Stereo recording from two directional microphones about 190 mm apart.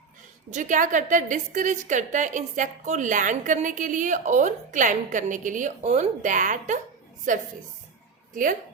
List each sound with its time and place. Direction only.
0.5 s a woman's voice: 40° right (ahead or behind)